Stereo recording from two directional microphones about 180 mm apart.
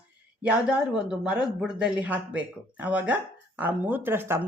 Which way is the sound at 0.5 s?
5° right (ahead or behind).